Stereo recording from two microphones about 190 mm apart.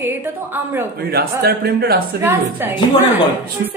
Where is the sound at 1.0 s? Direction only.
55° right (ahead or behind).